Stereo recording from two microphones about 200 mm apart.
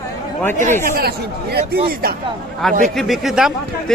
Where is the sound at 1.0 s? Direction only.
50° right (ahead or behind).